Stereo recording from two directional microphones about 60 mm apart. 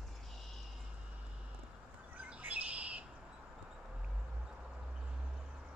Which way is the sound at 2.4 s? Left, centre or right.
Right.